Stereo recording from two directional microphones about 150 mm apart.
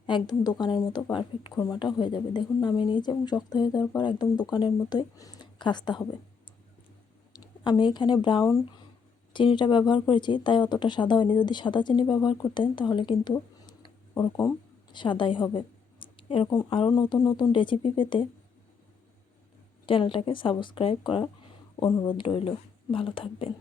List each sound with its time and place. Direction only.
0.0 s a woman's voice: 30° left (ahead or behind)
7.3 s speech: 30° left (ahead or behind)
19.8 s speech: 35° left (ahead or behind)